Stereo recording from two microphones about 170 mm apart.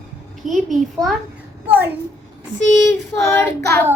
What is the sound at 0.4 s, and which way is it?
Speech, centre (ahead or behind).